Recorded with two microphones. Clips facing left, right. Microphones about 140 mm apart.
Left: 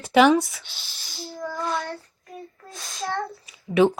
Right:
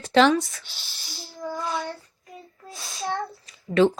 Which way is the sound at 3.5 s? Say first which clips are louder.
Even; 10° left (ahead or behind).